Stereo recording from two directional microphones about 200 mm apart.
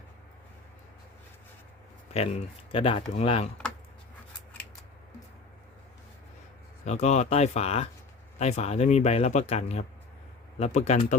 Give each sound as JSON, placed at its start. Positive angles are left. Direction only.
{"t": 2.1, "sound": "speech", "side_deg": 30}
{"t": 6.8, "sound": "speech", "side_deg": 35}